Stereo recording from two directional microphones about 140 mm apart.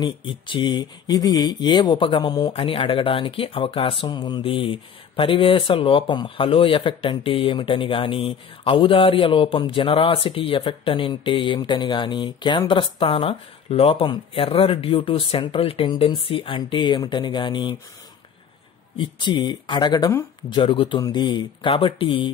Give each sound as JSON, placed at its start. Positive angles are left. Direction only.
{"t": 0.0, "sound": "speech", "side_deg": 35}
{"t": 18.9, "sound": "speech", "side_deg": 35}